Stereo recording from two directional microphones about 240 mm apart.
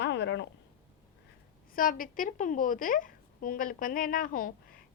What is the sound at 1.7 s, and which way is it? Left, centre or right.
A woman's voice, left.